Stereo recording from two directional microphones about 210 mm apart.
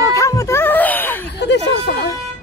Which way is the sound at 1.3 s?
55° left (ahead or behind).